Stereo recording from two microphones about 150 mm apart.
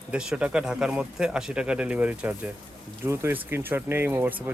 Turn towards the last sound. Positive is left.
turn(degrees=-15)  # may be behind; listen again after turning